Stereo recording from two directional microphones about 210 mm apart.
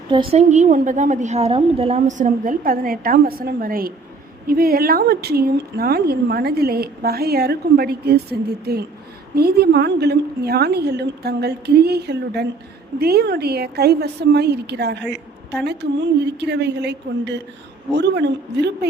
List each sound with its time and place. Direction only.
0.1 s a woman's voice: 25° right (ahead or behind); by 18.9 s 55° right (ahead or behind)